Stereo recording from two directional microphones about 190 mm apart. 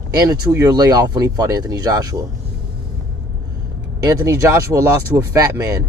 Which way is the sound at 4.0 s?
20° right (ahead or behind).